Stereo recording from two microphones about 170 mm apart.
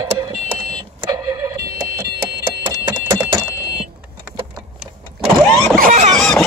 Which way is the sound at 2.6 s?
25° right (ahead or behind).